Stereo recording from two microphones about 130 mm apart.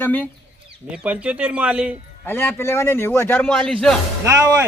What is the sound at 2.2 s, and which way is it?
A man's voice, 15° left (ahead or behind).